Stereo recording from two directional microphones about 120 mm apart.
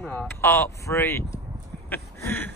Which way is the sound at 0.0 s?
15° left (ahead or behind).